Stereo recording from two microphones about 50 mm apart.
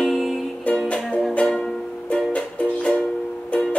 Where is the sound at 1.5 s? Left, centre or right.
Centre.